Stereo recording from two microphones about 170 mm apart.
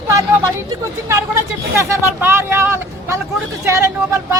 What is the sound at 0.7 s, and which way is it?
Speech, 15° right (ahead or behind).